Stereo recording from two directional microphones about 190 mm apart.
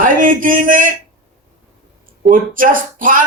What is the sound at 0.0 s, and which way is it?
Speech, 45° right (ahead or behind).